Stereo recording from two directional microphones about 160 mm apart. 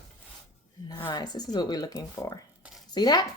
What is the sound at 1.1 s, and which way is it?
Speech, 25° left (ahead or behind).